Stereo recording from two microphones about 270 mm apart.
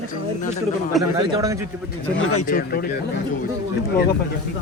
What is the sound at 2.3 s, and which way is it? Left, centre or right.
Speech, left.